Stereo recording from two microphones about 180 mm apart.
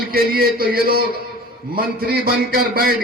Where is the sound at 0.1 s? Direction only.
55° right (ahead or behind).